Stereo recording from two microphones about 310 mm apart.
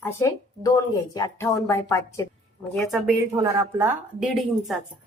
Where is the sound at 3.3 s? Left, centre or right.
Centre.